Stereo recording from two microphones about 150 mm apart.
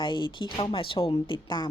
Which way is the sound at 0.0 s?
35° left (ahead or behind).